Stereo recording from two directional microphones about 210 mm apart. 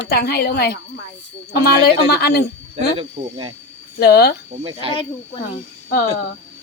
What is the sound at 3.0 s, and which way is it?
Speech, 25° right (ahead or behind).